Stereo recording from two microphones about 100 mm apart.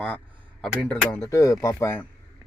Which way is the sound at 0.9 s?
15° left (ahead or behind).